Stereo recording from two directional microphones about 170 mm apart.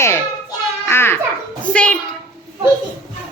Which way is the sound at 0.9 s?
15° left (ahead or behind).